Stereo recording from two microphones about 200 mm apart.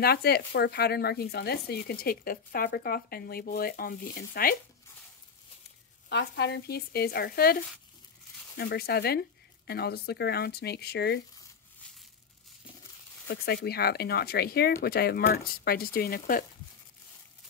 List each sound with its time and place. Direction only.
0.0 s speech: 50° left (ahead or behind)
6.0 s speech: 60° left (ahead or behind)
13.7 s speech: 50° left (ahead or behind)